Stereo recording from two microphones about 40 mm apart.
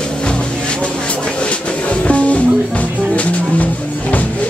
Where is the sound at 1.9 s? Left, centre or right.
Left.